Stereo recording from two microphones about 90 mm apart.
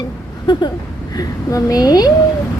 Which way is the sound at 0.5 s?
60° left (ahead or behind).